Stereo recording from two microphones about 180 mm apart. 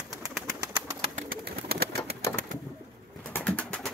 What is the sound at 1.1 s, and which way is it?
Pigeon, 55° right (ahead or behind).